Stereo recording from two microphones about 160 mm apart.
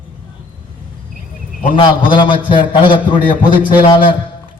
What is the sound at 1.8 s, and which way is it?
A man's voice, 30° left (ahead or behind).